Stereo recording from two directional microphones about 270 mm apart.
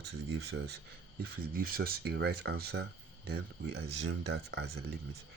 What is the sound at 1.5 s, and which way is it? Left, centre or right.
Speech, right.